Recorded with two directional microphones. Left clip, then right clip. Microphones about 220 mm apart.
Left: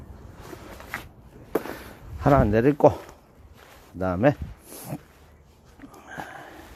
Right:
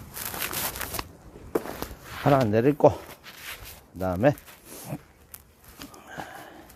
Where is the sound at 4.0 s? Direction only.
10° left (ahead or behind).